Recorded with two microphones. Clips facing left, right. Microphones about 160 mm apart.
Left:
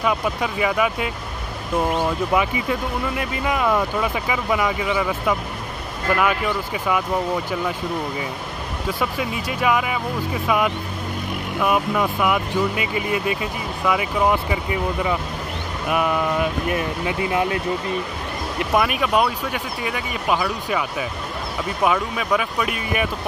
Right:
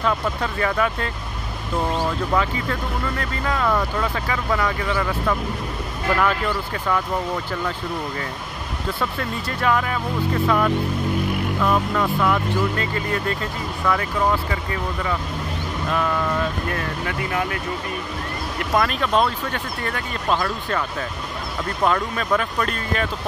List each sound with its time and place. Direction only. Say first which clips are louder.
0.0 s speech: left 1 dB; 10° left (ahead or behind)
9.0 s speech: left 2 dB; 10° left (ahead or behind)
18.7 s speech: left 1 dB; 10° left (ahead or behind)